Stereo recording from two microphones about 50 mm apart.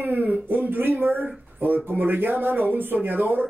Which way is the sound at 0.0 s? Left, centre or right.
Right.